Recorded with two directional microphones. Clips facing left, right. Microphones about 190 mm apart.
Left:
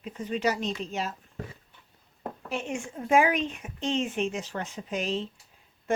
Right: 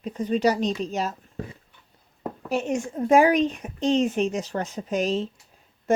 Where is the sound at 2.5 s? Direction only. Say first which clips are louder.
Right 8 dB; 40° right (ahead or behind).